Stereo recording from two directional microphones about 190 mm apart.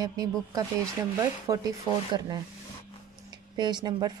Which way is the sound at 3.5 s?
25° right (ahead or behind).